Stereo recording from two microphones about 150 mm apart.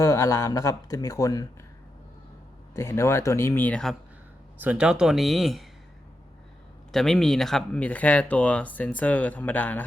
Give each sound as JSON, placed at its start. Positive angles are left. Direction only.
{"t": 0.0, "sound": "speech", "side_deg": 20}
{"t": 2.7, "sound": "speech", "side_deg": 15}
{"t": 4.6, "sound": "speech", "side_deg": -10}
{"t": 6.9, "sound": "speech", "side_deg": 0}